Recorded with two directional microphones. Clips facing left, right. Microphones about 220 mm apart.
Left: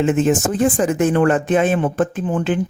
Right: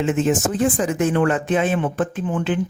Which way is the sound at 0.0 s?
50° left (ahead or behind).